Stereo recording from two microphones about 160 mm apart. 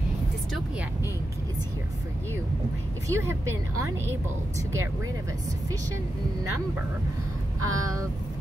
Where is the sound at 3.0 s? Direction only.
15° right (ahead or behind).